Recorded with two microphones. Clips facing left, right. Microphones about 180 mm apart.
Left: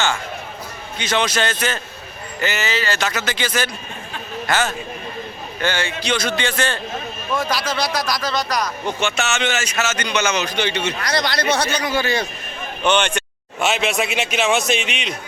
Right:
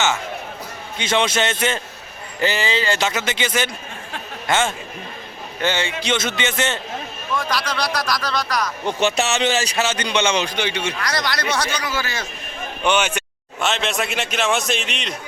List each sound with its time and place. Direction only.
0.9 s a man's voice: 25° right (ahead or behind)
7.3 s speech: 5° left (ahead or behind)
9.0 s a man's voice: 35° right (ahead or behind)
10.6 s speech: 10° right (ahead or behind)
10.9 s a man's voice: 25° left (ahead or behind)
12.8 s speech: 5° right (ahead or behind)
13.6 s speech: 10° left (ahead or behind)